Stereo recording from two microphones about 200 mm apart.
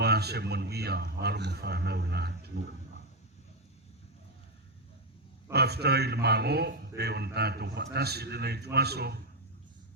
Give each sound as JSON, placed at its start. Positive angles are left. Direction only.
{"t": 0.0, "sound": "a man's voice", "side_deg": -55}
{"t": 5.5, "sound": "a man's voice", "side_deg": -55}